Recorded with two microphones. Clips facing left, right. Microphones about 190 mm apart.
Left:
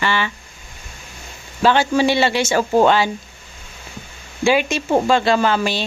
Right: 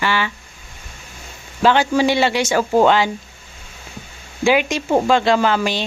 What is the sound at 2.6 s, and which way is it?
Speech, 5° left (ahead or behind).